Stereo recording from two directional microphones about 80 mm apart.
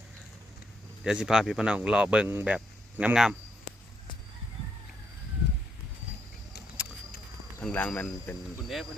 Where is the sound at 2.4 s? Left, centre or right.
Centre.